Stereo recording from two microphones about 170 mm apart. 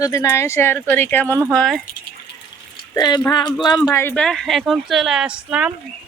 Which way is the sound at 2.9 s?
20° left (ahead or behind).